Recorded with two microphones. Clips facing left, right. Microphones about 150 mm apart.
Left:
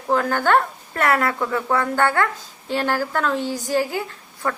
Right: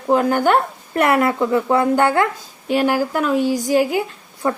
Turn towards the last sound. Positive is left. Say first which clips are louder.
# right 5 dB
turn(degrees=-15)  # may be behind; listen again after turning